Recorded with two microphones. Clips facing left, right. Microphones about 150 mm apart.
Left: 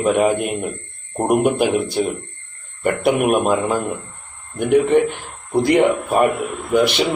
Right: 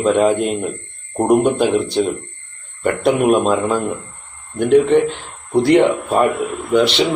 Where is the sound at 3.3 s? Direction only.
10° left (ahead or behind).